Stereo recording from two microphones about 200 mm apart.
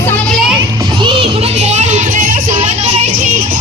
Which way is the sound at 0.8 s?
25° right (ahead or behind).